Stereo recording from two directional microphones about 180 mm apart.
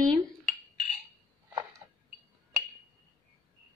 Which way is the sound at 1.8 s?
20° right (ahead or behind).